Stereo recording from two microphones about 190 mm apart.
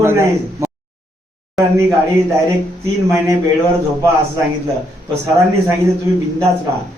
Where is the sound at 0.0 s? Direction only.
15° right (ahead or behind).